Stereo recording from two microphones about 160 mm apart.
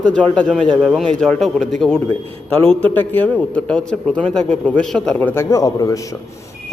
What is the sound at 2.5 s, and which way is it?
A man's voice, 10° left (ahead or behind).